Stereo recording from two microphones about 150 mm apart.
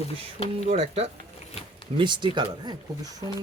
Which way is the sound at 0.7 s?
45° right (ahead or behind).